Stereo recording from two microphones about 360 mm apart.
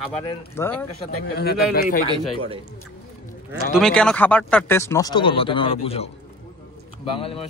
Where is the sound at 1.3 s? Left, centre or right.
Left.